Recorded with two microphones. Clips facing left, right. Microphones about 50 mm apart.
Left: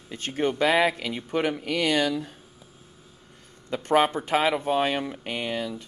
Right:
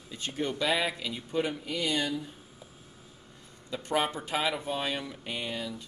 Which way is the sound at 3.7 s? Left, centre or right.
Left.